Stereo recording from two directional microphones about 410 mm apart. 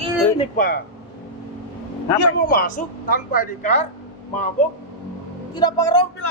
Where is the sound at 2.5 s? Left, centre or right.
Left.